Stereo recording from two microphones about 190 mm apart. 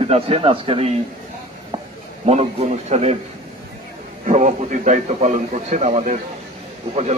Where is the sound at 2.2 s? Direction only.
35° right (ahead or behind).